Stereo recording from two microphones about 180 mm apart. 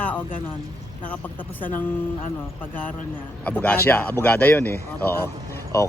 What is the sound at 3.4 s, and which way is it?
Speech, 10° left (ahead or behind).